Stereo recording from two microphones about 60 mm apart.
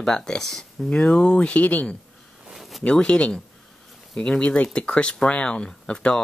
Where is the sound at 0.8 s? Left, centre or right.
Centre.